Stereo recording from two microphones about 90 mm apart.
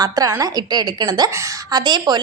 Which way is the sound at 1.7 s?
50° right (ahead or behind).